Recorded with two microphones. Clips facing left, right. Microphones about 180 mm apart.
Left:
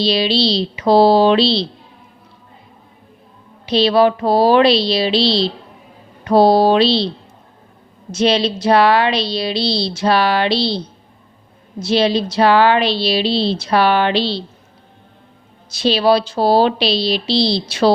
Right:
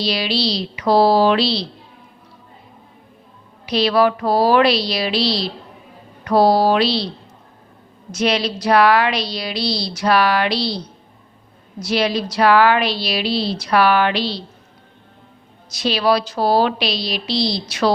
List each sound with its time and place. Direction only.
0.0 s speech: 25° left (ahead or behind)
3.7 s speech: 25° left (ahead or behind)
8.1 s speech: 25° left (ahead or behind)
15.7 s speech: 30° left (ahead or behind)